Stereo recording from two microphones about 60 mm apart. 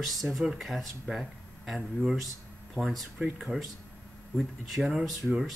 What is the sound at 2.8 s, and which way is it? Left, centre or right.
Speech, right.